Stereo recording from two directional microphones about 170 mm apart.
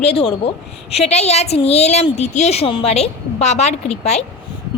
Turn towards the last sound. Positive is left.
turn(degrees=40)  # may be behind; listen again after turning